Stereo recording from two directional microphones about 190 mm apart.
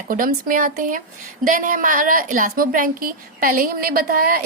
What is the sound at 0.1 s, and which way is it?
A woman's voice, 45° right (ahead or behind).